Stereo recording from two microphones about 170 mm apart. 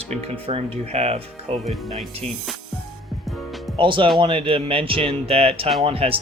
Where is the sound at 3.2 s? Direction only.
Centre (ahead or behind).